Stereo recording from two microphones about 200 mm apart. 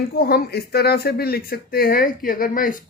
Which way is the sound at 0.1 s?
50° left (ahead or behind).